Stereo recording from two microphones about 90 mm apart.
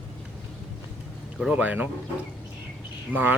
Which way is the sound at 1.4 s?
15° right (ahead or behind).